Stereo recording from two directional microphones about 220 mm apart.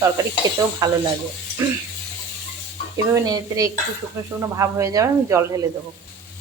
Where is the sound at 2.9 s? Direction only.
15° right (ahead or behind).